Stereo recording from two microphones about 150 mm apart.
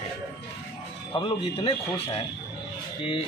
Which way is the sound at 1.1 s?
35° left (ahead or behind).